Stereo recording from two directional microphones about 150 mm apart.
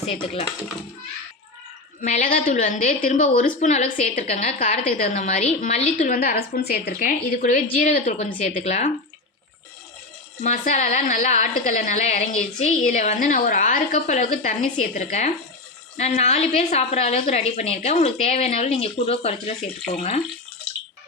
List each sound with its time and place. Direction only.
0.0 s speech: 45° left (ahead or behind)
2.0 s a woman's voice: 60° left (ahead or behind)
6.1 s a woman's voice: 80° left; by 8.9 s 50° left (ahead or behind)
10.4 s a woman's voice: 60° left (ahead or behind)